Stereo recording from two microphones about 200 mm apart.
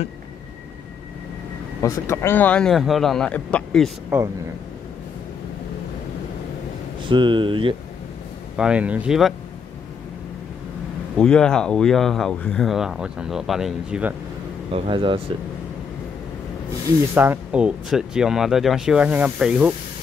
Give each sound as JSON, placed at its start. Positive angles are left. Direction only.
{"t": 1.8, "sound": "speech", "side_deg": 15}
{"t": 4.1, "sound": "speech", "side_deg": -10}
{"t": 7.0, "sound": "speech", "side_deg": -25}
{"t": 8.5, "sound": "speech", "side_deg": -5}
{"t": 11.1, "sound": "speech", "side_deg": 5}
{"t": 14.7, "sound": "speech", "side_deg": -25}
{"t": 17.1, "sound": "speech", "side_deg": -10}